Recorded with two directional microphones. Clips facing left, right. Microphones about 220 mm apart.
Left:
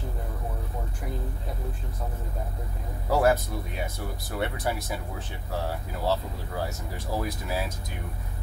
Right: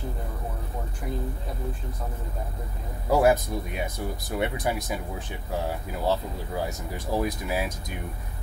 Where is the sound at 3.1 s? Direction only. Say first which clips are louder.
Right 2 dB; 15° right (ahead or behind).